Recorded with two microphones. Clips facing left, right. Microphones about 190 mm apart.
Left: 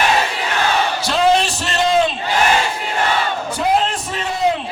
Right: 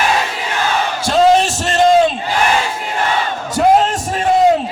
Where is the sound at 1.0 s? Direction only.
45° right (ahead or behind).